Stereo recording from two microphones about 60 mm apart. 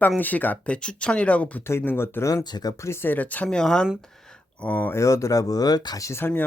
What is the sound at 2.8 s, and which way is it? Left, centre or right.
Speech, left.